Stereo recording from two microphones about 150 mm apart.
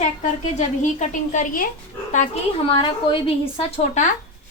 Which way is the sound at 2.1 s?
50° left (ahead or behind).